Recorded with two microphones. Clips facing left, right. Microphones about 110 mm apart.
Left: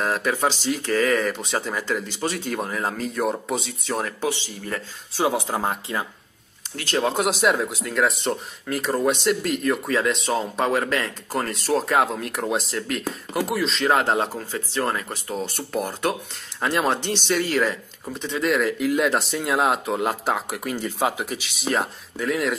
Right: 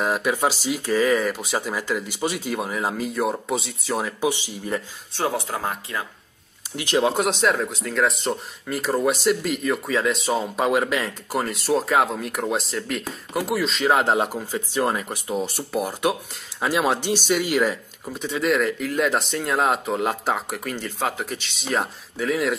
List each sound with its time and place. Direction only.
0.0 s speech: 10° right (ahead or behind)
4.2 s speech: 15° right (ahead or behind)
5.1 s speech: 10° left (ahead or behind)
5.5 s speech: 25° left (ahead or behind)
6.8 s speech: 15° right (ahead or behind)
7.1 s speech: centre (ahead or behind)